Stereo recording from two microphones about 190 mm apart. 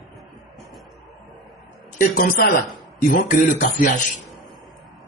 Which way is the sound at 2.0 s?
50° left (ahead or behind).